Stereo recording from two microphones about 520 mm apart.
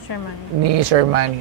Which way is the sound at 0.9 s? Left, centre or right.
Right.